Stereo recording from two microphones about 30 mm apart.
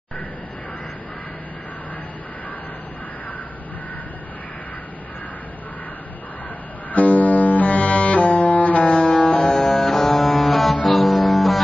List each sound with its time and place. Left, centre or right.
6.9 s music: left
9.4 s music: left
9.8 s music: centre